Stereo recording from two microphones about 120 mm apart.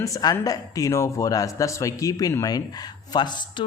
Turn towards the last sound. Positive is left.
turn(degrees=40)  # may be behind; listen again after turning